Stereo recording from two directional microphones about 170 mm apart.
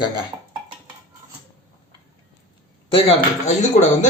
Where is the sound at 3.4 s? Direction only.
45° left (ahead or behind).